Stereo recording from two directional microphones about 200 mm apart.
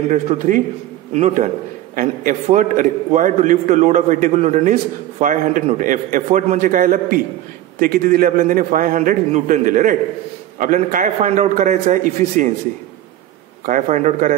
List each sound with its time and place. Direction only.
0.1 s a man's voice: 35° right (ahead or behind)
13.7 s a man's voice: 40° right (ahead or behind)